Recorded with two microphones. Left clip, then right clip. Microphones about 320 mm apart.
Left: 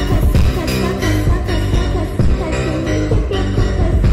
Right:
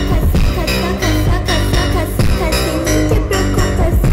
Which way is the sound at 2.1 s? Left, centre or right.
Right.